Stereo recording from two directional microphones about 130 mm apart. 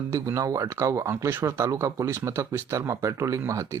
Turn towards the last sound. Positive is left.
turn(degrees=-25)  # may be behind; listen again after turning